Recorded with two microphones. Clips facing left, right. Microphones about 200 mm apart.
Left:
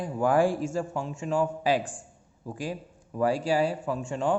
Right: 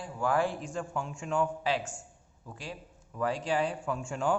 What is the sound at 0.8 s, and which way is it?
Speech, 30° left (ahead or behind).